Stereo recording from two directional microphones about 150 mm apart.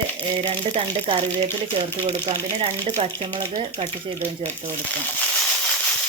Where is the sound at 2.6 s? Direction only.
40° right (ahead or behind).